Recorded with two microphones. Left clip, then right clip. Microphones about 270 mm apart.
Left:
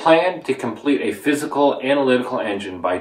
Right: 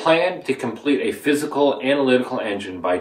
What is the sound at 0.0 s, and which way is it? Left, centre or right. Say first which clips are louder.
Speech: left 3 dB; centre.